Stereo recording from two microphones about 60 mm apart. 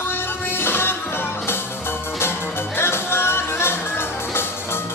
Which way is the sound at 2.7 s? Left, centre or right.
Left.